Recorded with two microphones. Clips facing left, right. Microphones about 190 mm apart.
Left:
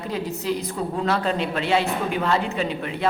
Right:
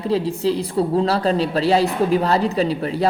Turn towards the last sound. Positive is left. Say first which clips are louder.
# right 6 dB
turn(degrees=-35)  # may be behind; listen again after turning